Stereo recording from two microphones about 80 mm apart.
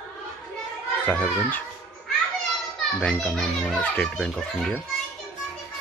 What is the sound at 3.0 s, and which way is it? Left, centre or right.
Speech, centre.